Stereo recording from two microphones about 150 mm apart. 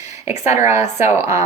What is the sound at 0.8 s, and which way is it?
Speech, 50° left (ahead or behind).